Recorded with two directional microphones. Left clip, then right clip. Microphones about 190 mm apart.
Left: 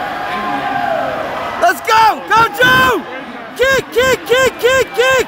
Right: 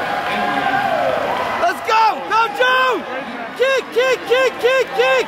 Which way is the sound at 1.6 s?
45° left (ahead or behind).